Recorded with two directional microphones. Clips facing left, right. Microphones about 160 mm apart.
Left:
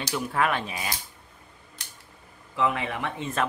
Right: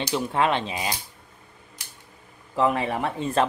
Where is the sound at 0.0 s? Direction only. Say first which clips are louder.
Right 3 dB; 25° right (ahead or behind).